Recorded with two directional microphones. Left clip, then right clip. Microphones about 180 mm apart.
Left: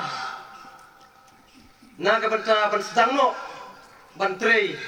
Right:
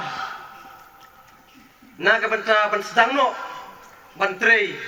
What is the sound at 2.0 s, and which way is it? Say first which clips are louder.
Speech: right 2 dB; 25° left (ahead or behind).